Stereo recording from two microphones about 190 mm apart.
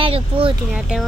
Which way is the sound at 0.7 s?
5° right (ahead or behind).